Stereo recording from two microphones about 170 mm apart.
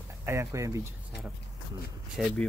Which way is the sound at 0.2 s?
15° right (ahead or behind).